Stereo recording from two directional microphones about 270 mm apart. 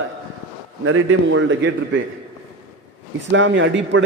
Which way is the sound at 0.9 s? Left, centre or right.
Right.